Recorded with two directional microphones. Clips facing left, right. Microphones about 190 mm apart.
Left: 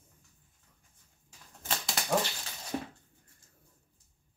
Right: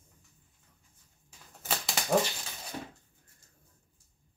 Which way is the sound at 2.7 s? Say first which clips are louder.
Left 5 dB; 45° left (ahead or behind).